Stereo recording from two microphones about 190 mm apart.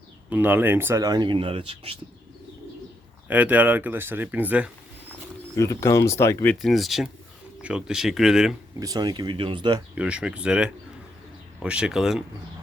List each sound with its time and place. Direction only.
0.3 s speech: 10° right (ahead or behind); by 2.0 s 30° right (ahead or behind)
3.2 s speech: 10° right (ahead or behind)
5.5 s speech: 15° left (ahead or behind); by 8.5 s centre (ahead or behind)
8.8 s speech: 20° right (ahead or behind)
9.9 s speech: 5° right (ahead or behind)